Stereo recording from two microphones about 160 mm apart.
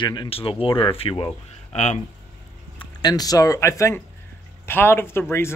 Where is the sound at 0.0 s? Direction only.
30° left (ahead or behind).